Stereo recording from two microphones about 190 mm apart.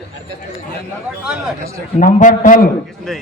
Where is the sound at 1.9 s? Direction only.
45° left (ahead or behind).